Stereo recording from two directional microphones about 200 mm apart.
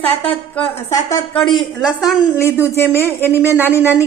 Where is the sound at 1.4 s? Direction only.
Centre (ahead or behind).